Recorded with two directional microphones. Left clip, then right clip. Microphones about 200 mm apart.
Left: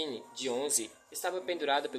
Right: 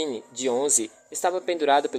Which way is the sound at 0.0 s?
35° right (ahead or behind).